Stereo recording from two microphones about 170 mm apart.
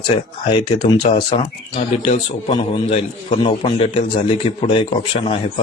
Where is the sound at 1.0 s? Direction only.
40° left (ahead or behind).